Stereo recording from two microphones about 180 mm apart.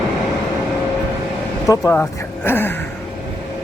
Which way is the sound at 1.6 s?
20° left (ahead or behind).